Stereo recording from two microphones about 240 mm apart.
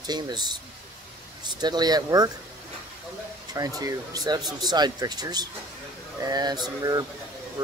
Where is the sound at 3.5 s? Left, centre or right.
Centre.